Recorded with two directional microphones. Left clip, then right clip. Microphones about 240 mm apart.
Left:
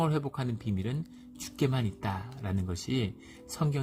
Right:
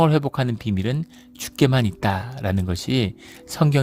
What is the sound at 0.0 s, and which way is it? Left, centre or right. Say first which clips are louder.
Speech: right 12 dB; right.